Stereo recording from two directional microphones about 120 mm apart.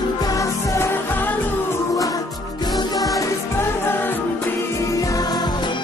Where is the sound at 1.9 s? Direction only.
30° left (ahead or behind).